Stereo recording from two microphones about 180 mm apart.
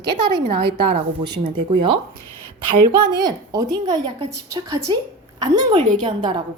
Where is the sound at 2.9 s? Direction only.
25° right (ahead or behind).